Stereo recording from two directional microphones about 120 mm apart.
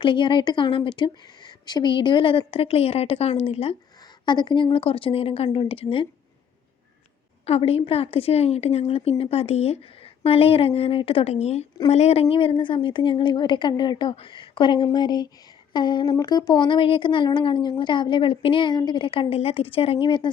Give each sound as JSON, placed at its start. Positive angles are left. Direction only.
{"t": 0.0, "sound": "a woman's voice", "side_deg": 40}
{"t": 4.3, "sound": "a woman's voice", "side_deg": 40}
{"t": 7.4, "sound": "a woman's voice", "side_deg": 55}